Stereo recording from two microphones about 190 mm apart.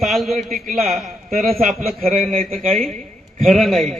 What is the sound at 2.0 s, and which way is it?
Speech, 45° right (ahead or behind).